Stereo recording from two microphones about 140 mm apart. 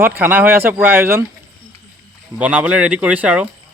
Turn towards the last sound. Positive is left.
turn(degrees=-10)  # may be behind; listen again after turning